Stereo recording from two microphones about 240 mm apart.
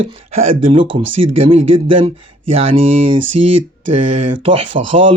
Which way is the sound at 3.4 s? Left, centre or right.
Right.